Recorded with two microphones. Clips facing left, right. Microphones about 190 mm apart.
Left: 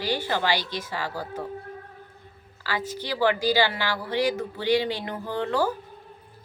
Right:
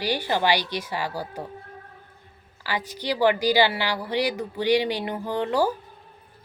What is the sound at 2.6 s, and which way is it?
A woman's voice, 15° right (ahead or behind).